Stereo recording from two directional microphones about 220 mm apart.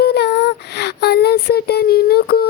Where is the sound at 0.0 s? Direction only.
50° left (ahead or behind).